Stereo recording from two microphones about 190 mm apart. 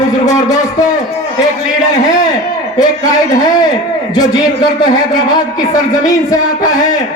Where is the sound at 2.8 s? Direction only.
20° left (ahead or behind).